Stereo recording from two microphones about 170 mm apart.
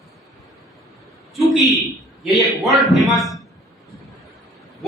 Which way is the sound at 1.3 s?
Centre (ahead or behind).